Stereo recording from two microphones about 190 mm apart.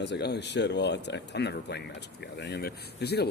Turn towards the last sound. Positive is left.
turn(degrees=60)  # may be behind; listen again after turning